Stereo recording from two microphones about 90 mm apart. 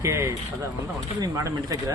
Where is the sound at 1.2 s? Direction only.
45° right (ahead or behind).